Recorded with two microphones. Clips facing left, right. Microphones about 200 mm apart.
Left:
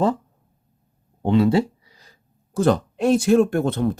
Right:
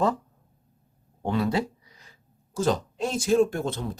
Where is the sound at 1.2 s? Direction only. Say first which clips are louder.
Left 8 dB; 25° left (ahead or behind).